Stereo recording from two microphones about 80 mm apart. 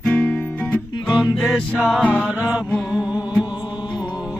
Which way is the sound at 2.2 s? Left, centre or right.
Centre.